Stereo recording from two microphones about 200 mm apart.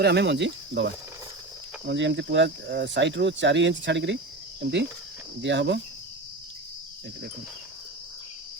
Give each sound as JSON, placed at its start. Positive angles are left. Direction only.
{"t": 0.0, "sound": "speech", "side_deg": -55}